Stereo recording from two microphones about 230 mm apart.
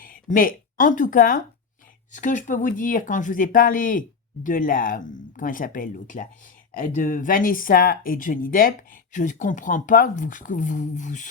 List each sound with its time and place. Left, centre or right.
0.0 s speech: left